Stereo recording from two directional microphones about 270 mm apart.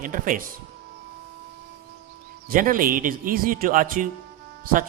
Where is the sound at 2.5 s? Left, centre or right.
Right.